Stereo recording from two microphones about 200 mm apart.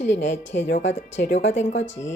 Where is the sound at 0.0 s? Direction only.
65° left (ahead or behind).